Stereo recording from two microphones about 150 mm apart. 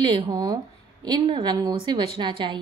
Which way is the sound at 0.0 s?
25° right (ahead or behind).